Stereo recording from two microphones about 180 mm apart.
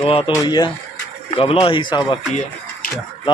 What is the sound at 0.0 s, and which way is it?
Speech, 30° left (ahead or behind).